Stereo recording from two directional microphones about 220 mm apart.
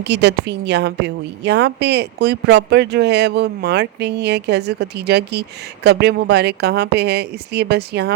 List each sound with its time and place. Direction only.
0.0 s a woman's voice: 50° right (ahead or behind)